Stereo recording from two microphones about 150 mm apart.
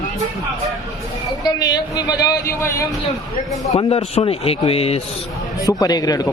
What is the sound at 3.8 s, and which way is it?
A man's voice, 40° left (ahead or behind).